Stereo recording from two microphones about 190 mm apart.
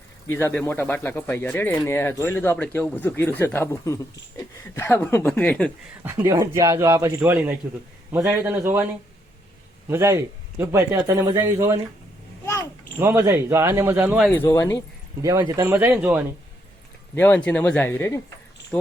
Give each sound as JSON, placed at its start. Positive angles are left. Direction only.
{"t": 0.3, "sound": "speech", "side_deg": 10}
{"t": 6.0, "sound": "a man's voice", "side_deg": -15}
{"t": 13.0, "sound": "a man's voice", "side_deg": -15}
{"t": 14.3, "sound": "speech", "side_deg": 10}
{"t": 15.2, "sound": "a man's voice", "side_deg": -15}
{"t": 15.7, "sound": "a man's voice", "side_deg": -5}
{"t": 17.2, "sound": "speech", "side_deg": 10}